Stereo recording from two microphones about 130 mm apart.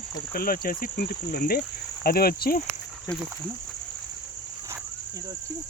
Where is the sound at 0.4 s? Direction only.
90° left.